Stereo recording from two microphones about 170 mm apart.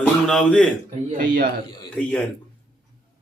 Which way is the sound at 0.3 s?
5° left (ahead or behind).